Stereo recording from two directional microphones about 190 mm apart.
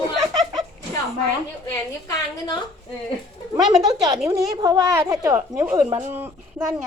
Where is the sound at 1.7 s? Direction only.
20° left (ahead or behind).